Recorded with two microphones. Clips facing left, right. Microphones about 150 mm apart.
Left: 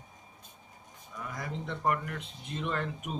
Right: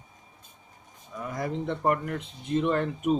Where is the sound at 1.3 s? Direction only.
35° right (ahead or behind).